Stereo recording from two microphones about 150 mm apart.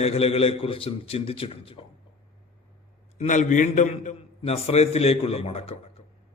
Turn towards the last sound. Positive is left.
turn(degrees=40)  # may be behind; listen again after turning